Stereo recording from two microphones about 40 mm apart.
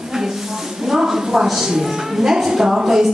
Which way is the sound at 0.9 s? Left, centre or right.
Centre.